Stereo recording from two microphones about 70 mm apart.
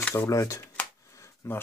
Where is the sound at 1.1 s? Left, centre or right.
Left.